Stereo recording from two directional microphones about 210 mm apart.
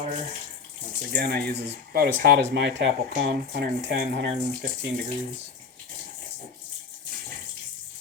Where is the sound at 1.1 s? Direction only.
50° right (ahead or behind).